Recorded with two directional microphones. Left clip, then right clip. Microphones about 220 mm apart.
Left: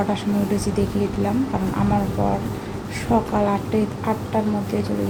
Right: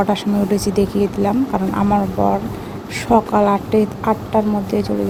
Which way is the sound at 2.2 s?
40° right (ahead or behind).